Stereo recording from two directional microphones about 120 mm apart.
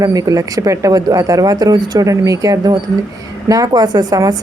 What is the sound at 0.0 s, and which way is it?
A woman's voice, 30° right (ahead or behind).